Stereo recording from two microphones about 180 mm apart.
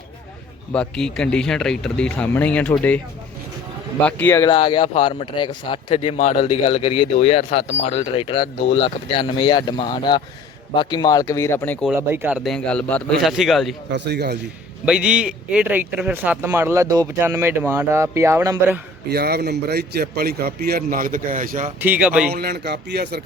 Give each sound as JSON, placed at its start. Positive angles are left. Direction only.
{"t": 0.7, "sound": "speech", "side_deg": 5}
{"t": 4.0, "sound": "speech", "side_deg": 10}
{"t": 4.4, "sound": "speech", "side_deg": 30}
{"t": 11.9, "sound": "speech", "side_deg": -10}
{"t": 12.4, "sound": "speech", "side_deg": 5}
{"t": 13.9, "sound": "speech", "side_deg": -70}
{"t": 14.8, "sound": "speech", "side_deg": -5}
{"t": 19.1, "sound": "a man's voice", "side_deg": -60}
{"t": 21.8, "sound": "speech", "side_deg": -10}
{"t": 22.3, "sound": "a man's voice", "side_deg": -60}